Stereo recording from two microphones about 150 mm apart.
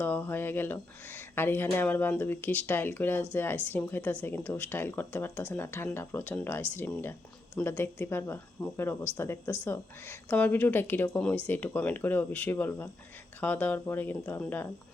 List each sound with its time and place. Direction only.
0.0 s speech: 15° left (ahead or behind)